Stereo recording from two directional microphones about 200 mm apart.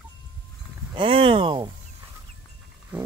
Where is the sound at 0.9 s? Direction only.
25° right (ahead or behind).